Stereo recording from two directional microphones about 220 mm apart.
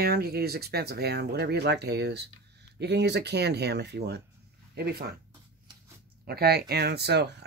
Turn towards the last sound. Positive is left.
turn(degrees=-50)  # may be behind; listen again after turning